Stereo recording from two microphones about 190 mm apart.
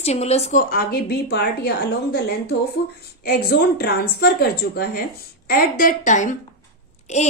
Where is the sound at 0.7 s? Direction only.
55° left (ahead or behind).